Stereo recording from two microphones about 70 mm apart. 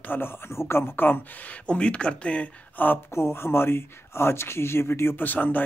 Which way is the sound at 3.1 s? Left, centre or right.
Left.